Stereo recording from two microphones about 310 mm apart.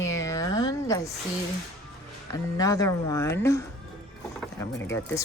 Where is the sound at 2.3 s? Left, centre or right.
Centre.